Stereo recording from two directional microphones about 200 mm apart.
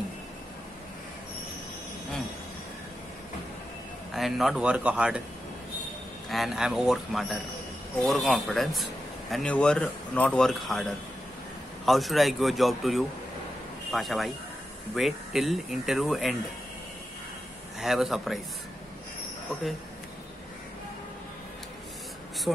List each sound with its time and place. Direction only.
4.1 s a man's voice: centre (ahead or behind)
6.2 s a man's voice: centre (ahead or behind)
17.7 s a man's voice: centre (ahead or behind)
19.5 s a man's voice: centre (ahead or behind)